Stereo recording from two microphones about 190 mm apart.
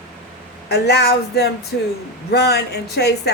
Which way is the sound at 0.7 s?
60° left (ahead or behind).